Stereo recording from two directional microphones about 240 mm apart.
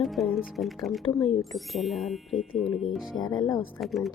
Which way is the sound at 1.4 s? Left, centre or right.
Centre.